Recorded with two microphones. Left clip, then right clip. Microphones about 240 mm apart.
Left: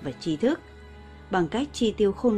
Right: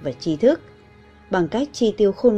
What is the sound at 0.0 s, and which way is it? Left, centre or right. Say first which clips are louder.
A woman's voice: right 8 dB; centre.